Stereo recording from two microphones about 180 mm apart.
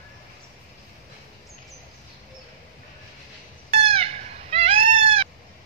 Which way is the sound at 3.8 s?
35° right (ahead or behind).